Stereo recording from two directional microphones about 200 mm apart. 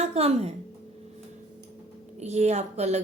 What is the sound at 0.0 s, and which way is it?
Speech, 30° right (ahead or behind).